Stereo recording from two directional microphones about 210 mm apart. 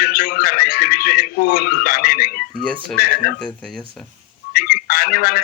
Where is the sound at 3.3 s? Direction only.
5° left (ahead or behind).